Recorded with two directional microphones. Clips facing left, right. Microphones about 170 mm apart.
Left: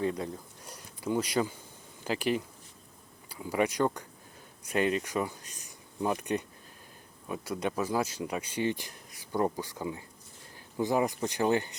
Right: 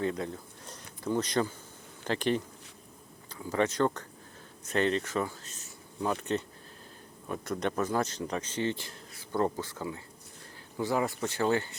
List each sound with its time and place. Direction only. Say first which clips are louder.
0.1 s speech: even; 10° left (ahead or behind)